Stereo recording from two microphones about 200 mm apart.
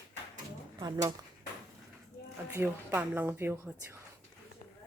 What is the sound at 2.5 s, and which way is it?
Speech, 10° right (ahead or behind).